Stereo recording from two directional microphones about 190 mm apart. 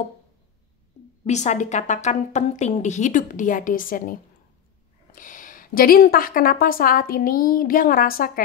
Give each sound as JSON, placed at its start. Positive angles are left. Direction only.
{"t": 1.2, "sound": "a woman's voice", "side_deg": 40}